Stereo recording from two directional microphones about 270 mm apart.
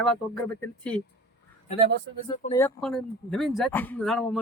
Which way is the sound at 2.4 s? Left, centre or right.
Centre.